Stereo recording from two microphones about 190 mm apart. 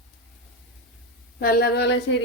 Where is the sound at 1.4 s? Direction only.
55° left (ahead or behind).